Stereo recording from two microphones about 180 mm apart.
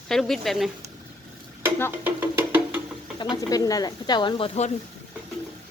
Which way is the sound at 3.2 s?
20° left (ahead or behind).